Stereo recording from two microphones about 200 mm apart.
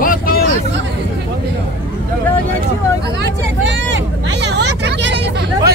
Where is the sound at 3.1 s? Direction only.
60° right (ahead or behind).